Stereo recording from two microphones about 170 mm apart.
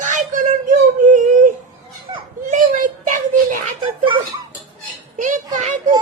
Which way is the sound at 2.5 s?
50° right (ahead or behind).